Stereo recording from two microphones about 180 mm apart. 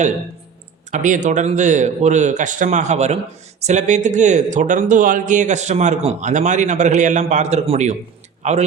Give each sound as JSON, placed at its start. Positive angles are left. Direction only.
{"t": 0.9, "sound": "a man's voice", "side_deg": -45}